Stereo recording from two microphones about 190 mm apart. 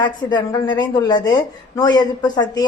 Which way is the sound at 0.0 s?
25° left (ahead or behind).